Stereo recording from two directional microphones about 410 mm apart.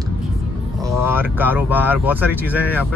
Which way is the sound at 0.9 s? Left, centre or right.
Centre.